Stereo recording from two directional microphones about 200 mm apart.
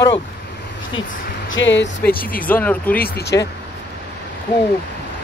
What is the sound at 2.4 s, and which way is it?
Speech, 5° left (ahead or behind).